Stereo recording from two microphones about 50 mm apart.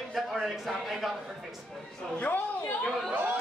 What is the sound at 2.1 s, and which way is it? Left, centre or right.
Speech, left.